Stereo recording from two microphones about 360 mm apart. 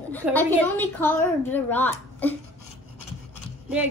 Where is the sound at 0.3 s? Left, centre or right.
Centre.